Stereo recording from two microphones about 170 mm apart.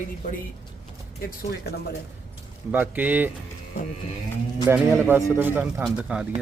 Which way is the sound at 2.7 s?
10° right (ahead or behind).